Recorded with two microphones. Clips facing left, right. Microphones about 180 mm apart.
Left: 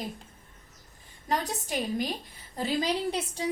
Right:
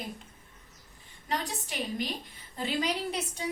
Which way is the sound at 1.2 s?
40° left (ahead or behind).